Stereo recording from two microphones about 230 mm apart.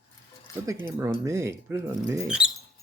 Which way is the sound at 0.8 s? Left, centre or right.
Centre.